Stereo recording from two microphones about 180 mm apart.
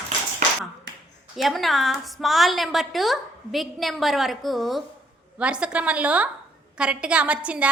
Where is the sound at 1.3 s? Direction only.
Centre (ahead or behind).